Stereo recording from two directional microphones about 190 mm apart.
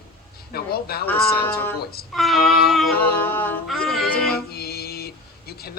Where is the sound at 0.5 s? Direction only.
55° left (ahead or behind).